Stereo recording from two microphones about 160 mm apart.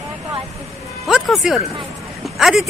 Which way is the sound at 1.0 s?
Centre (ahead or behind).